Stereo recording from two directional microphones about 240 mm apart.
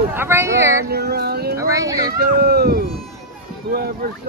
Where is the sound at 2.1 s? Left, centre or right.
Right.